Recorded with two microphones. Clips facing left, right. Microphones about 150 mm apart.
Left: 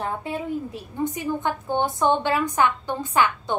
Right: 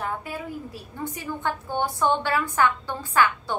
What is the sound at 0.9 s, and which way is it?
A woman's voice, 20° left (ahead or behind).